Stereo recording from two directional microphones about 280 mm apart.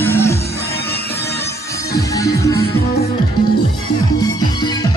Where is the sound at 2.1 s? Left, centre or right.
Centre.